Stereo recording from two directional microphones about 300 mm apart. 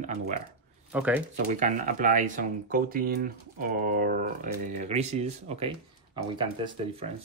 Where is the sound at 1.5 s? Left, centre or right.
Right.